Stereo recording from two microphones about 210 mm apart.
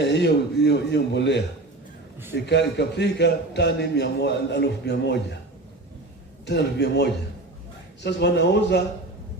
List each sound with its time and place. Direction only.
0.0 s a man's voice: 55° left (ahead or behind)
6.4 s a man's voice: 55° left (ahead or behind)